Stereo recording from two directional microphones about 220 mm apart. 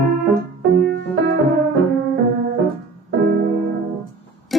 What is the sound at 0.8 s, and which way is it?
Music, 50° right (ahead or behind).